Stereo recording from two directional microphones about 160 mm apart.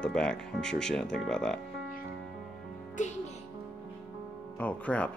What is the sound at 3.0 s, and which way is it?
Speech, 50° left (ahead or behind).